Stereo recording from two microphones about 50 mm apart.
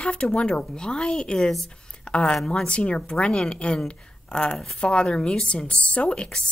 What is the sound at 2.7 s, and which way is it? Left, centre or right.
Speech, centre.